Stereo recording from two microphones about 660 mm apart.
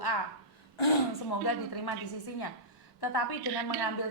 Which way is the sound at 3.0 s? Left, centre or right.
Left.